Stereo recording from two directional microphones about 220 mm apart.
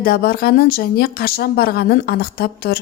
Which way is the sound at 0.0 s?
45° left (ahead or behind).